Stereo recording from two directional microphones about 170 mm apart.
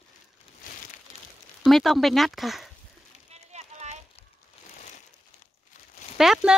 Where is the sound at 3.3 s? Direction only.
40° right (ahead or behind).